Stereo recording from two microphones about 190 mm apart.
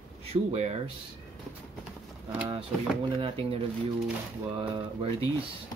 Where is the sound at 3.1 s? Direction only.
30° right (ahead or behind).